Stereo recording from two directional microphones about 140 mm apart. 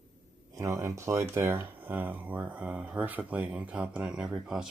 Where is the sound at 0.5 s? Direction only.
25° right (ahead or behind).